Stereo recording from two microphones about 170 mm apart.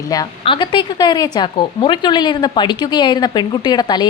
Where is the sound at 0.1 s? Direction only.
25° left (ahead or behind).